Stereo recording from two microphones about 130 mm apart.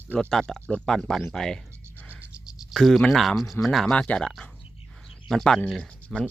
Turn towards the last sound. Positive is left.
turn(degrees=5)  # may be behind; listen again after turning